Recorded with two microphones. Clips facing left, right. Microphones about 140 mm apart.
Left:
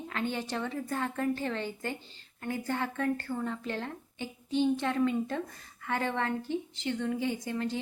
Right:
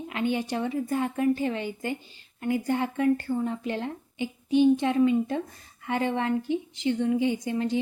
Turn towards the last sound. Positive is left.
turn(degrees=-20)  # may be behind; listen again after turning